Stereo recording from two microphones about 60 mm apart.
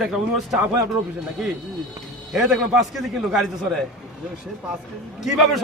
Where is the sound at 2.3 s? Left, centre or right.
Centre.